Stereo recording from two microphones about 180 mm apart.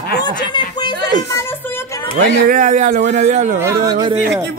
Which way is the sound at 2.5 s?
45° right (ahead or behind).